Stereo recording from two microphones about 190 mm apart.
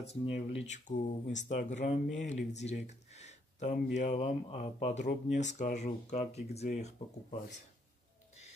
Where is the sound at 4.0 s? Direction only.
35° left (ahead or behind).